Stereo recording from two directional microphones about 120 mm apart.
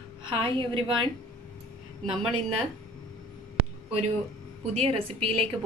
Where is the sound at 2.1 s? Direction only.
Centre (ahead or behind).